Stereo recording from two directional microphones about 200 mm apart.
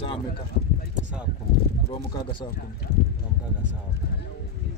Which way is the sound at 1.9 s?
25° left (ahead or behind).